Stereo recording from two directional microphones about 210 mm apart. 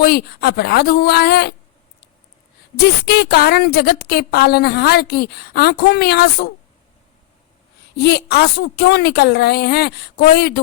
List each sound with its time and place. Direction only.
0.0 s a woman's voice: 50° left (ahead or behind)
2.7 s a woman's voice: 50° left (ahead or behind)
7.9 s a woman's voice: 50° left (ahead or behind)